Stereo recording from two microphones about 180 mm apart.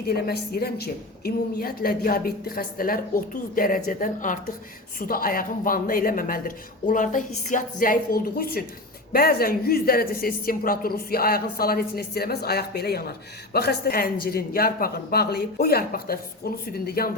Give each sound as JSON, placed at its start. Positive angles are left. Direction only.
{"t": 0.1, "sound": "a woman's voice", "side_deg": 60}